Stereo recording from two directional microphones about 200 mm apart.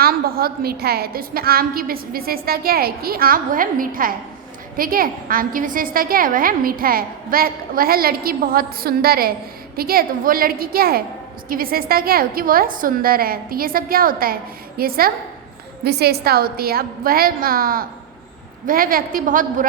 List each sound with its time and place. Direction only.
0.0 s a woman's voice: 50° right (ahead or behind)